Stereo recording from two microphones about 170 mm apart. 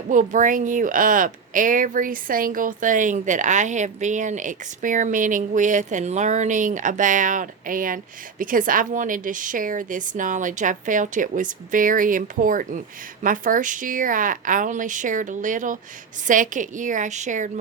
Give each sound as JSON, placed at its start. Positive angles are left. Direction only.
{"t": 0.1, "sound": "speech", "side_deg": -50}